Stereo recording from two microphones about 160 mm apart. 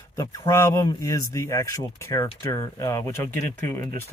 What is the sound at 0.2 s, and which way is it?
Speech, 20° left (ahead or behind).